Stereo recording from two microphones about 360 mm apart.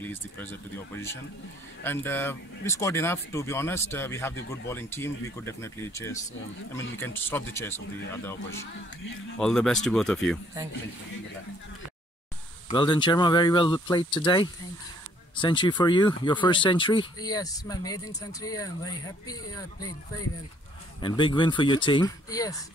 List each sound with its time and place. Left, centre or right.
0.0 s speech: centre
1.8 s speech: centre
9.4 s speech: centre
12.6 s speech: centre
21.0 s speech: centre